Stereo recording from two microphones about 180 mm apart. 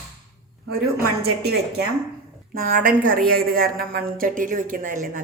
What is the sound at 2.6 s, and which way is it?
A woman's voice, 50° right (ahead or behind).